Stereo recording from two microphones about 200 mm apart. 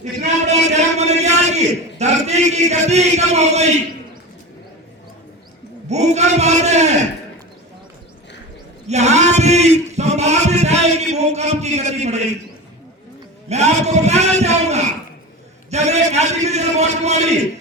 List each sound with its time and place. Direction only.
0.0 s a sound: 35° right (ahead or behind)
5.9 s speech: 35° right (ahead or behind)
8.9 s speech: 35° right (ahead or behind)
13.5 s speech: 35° right (ahead or behind)